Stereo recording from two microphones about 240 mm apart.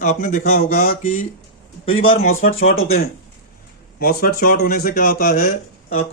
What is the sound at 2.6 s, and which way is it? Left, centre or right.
Speech, left.